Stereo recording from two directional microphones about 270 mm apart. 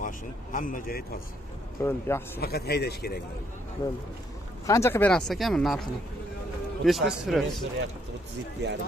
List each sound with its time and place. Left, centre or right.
0.0 s speech: left
1.8 s speech: centre
2.4 s speech: left
4.6 s speech: centre
8.6 s speech: right